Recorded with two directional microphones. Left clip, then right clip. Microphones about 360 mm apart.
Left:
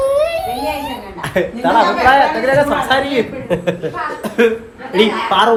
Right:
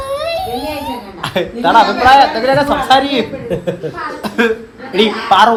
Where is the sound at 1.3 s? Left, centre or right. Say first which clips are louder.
Right 3 dB; centre.